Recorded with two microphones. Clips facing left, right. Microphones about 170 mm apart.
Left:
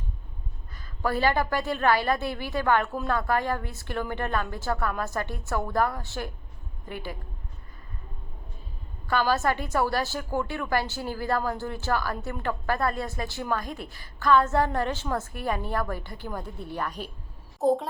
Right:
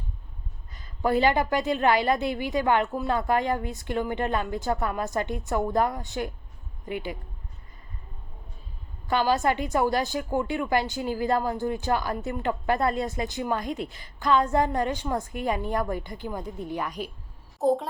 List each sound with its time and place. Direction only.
0.7 s a woman's voice: 20° right (ahead or behind)
9.0 s a woman's voice: 20° right (ahead or behind)
17.6 s a child's voice: centre (ahead or behind)